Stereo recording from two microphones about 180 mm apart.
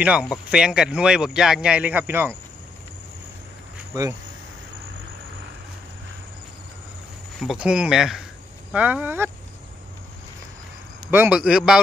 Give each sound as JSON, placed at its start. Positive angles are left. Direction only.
{"t": 0.0, "sound": "speech", "side_deg": -5}
{"t": 3.9, "sound": "speech", "side_deg": -20}
{"t": 7.3, "sound": "speech", "side_deg": -5}
{"t": 11.1, "sound": "speech", "side_deg": -10}